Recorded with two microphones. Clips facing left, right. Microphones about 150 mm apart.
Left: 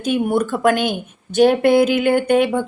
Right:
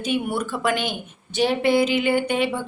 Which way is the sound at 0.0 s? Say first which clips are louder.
Left 6 dB; 45° left (ahead or behind).